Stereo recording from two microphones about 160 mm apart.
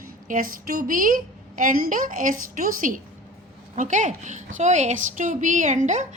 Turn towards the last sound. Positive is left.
turn(degrees=-50)  # may be behind; listen again after turning